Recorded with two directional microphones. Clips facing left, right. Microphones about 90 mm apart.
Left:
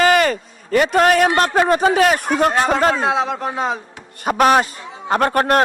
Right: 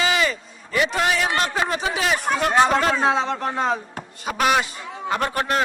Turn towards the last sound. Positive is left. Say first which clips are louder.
# left 7 dB
turn(degrees=55)  # may be behind; listen again after turning